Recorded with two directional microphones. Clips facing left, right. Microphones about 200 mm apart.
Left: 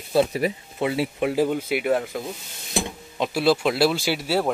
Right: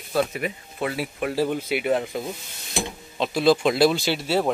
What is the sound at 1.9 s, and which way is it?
Speech, centre (ahead or behind).